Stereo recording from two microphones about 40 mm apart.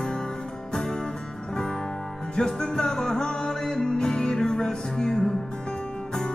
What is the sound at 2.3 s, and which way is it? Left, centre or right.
Music, centre.